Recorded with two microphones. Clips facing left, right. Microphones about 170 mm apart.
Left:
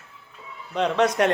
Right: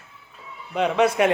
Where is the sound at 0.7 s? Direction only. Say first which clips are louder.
Right 1 dB; 10° right (ahead or behind).